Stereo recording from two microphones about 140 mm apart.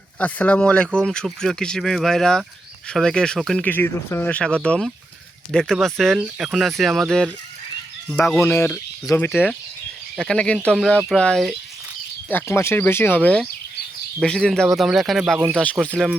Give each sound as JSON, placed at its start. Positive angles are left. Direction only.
{"t": 0.2, "sound": "speech", "side_deg": 10}
{"t": 8.4, "sound": "speech", "side_deg": 15}
{"t": 12.3, "sound": "speech", "side_deg": 15}